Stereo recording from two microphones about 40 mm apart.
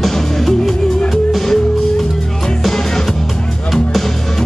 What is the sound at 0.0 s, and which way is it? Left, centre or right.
Music, centre.